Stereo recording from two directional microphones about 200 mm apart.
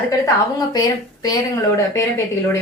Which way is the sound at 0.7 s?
20° left (ahead or behind).